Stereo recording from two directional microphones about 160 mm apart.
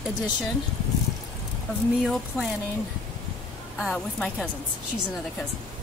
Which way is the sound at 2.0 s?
Centre (ahead or behind).